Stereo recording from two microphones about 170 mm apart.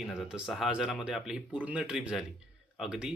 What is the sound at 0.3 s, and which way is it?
Speech, 5° right (ahead or behind).